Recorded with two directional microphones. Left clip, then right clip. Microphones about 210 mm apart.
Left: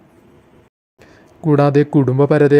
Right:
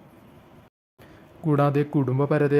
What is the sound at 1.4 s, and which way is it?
Speech, 20° left (ahead or behind).